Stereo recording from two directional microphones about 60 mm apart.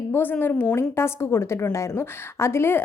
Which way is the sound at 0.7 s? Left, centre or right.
Left.